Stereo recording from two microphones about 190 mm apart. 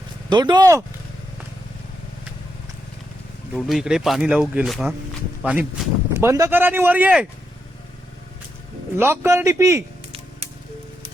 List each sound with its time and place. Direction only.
0.3 s speech: 25° right (ahead or behind)
3.5 s speech: centre (ahead or behind)
9.0 s speech: 10° right (ahead or behind)